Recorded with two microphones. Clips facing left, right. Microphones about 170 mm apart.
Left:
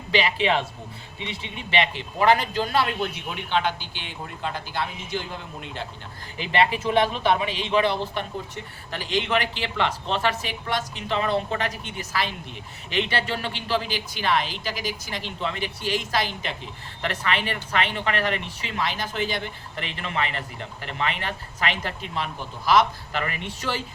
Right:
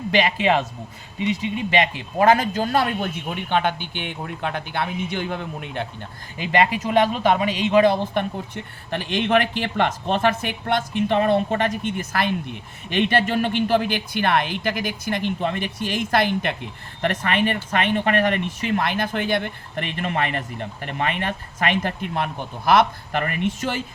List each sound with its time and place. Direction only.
0.1 s speech: 50° right (ahead or behind)
7.2 s speech: 40° right (ahead or behind)